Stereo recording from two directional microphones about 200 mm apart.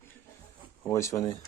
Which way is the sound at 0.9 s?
15° left (ahead or behind).